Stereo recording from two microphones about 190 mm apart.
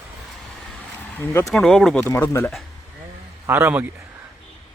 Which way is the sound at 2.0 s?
15° left (ahead or behind).